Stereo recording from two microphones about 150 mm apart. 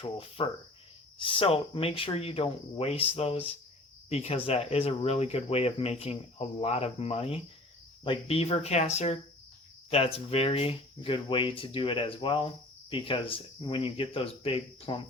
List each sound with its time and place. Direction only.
0.0 s speech: 40° left (ahead or behind)